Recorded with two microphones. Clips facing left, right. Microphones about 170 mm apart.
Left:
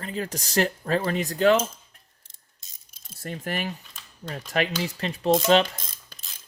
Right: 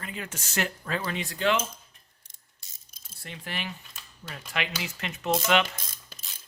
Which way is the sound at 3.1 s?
45° left (ahead or behind).